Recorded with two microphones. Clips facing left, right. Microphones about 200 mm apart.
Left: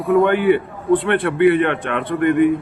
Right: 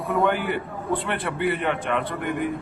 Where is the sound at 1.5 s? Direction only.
65° left (ahead or behind).